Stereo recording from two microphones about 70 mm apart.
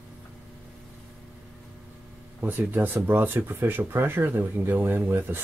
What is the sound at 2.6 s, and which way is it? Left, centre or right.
Speech, right.